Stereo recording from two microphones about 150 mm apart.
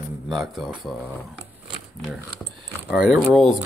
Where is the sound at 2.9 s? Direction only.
5° right (ahead or behind).